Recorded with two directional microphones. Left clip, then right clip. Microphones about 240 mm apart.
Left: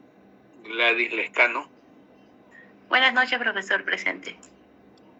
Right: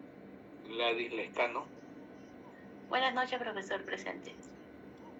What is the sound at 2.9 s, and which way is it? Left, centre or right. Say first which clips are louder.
A man's voice: left 12 dB; left.